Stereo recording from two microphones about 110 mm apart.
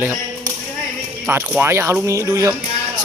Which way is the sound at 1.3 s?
20° right (ahead or behind).